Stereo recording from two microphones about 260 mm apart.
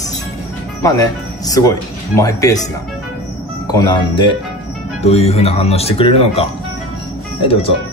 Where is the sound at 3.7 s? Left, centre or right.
Centre.